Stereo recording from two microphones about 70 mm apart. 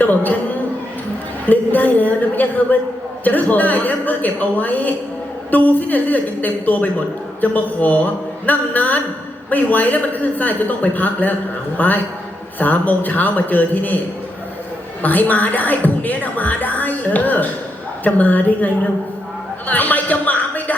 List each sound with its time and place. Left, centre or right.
0.0 s speech: left
1.5 s a sound: left
3.2 s speech: left
15.0 s speech: left
19.6 s music: left